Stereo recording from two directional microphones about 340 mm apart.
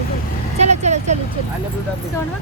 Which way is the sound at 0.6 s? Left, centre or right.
Centre.